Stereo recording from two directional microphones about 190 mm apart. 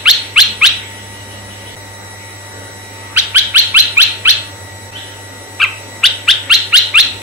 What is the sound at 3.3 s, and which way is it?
Bird, 10° right (ahead or behind).